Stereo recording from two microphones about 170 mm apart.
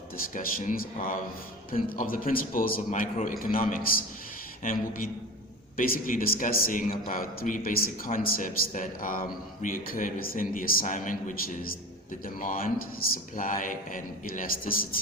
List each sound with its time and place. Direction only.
0.3 s a man's voice: 50° left (ahead or behind)